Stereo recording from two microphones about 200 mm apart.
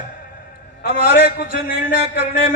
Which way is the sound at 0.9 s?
30° right (ahead or behind).